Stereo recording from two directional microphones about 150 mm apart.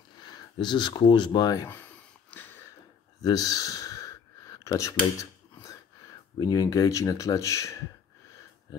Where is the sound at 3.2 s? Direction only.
25° left (ahead or behind).